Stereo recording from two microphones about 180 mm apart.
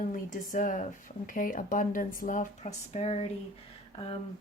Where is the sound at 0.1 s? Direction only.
45° left (ahead or behind).